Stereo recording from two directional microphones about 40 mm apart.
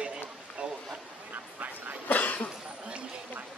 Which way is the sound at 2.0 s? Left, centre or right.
Left.